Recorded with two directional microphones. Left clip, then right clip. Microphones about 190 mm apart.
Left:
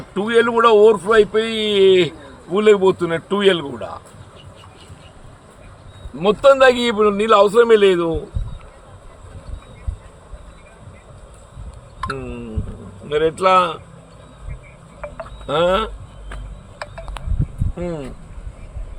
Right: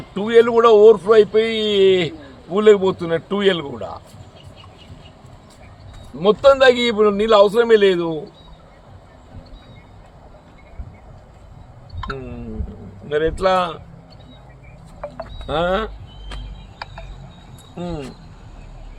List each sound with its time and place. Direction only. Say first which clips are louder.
0.1 s a man's voice: right 2 dB; 5° left (ahead or behind)
6.1 s a man's voice: left 1 dB; 10° left (ahead or behind)
12.1 s a sound: left 3 dB; 15° left (ahead or behind)
13.1 s a man's voice: left 2 dB; 10° left (ahead or behind)
15.4 s a man's voice: left 3 dB; 10° left (ahead or behind)
16.7 s a sound: left 2 dB; 40° left (ahead or behind)